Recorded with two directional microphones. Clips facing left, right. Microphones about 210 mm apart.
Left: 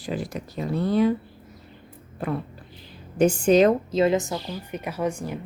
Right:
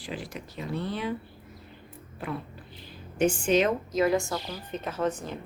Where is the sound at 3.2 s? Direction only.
40° left (ahead or behind).